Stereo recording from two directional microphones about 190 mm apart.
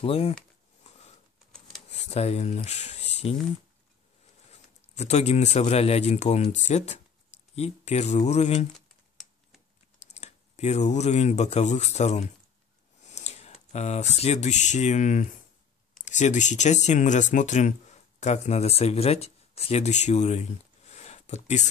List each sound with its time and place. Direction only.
0.0 s speech: 30° left (ahead or behind)
1.9 s speech: 35° left (ahead or behind)
4.5 s speech: 35° left (ahead or behind)
8.7 s computer keyboard: centre (ahead or behind)
10.1 s speech: 35° left (ahead or behind)